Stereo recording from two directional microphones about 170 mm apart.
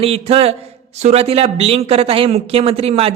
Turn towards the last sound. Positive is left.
turn(degrees=-35)  # may be behind; listen again after turning